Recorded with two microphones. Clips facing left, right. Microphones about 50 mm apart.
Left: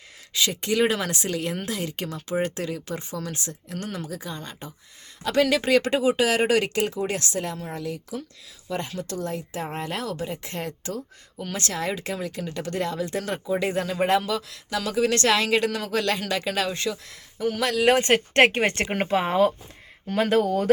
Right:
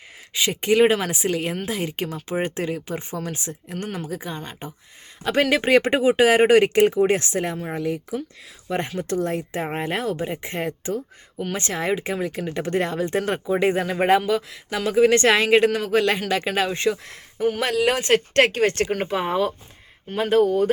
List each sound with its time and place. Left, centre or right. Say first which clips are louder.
0.3 s speech: right 5 dB; right
12.5 s speech: right 4 dB; right
16.7 s speech: right 6 dB; right
18.1 s a woman's voice: even; left
19.1 s speech: left 4 dB; left
20.1 s speech: right 3 dB; left